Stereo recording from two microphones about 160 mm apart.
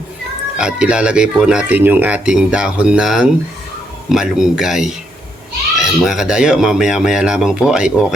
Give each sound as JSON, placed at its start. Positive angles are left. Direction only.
{"t": 0.6, "sound": "speech", "side_deg": -5}